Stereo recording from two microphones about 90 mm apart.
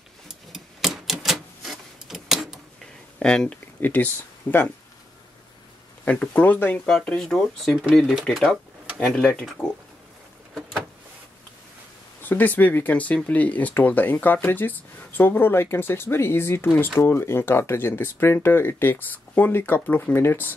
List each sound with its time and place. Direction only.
0.3 s typewriter: 5° right (ahead or behind)
3.2 s speech: 10° left (ahead or behind)
3.8 s speech: 20° left (ahead or behind)
6.0 s speech: 15° left (ahead or behind)
6.9 s speech: 5° left (ahead or behind)
8.0 s speech: 5° right (ahead or behind)
12.2 s speech: 20° left (ahead or behind)